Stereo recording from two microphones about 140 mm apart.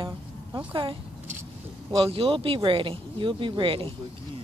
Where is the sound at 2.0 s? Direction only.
40° right (ahead or behind).